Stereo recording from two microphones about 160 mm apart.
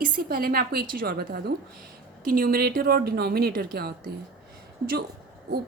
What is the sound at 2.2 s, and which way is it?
A woman's voice, 60° right (ahead or behind).